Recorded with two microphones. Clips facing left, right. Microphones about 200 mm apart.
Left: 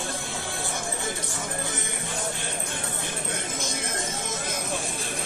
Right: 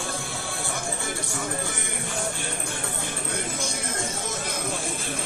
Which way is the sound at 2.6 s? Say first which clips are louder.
Right 1 dB; 20° left (ahead or behind).